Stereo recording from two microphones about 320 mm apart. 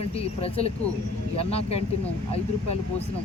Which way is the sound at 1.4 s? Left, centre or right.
Centre.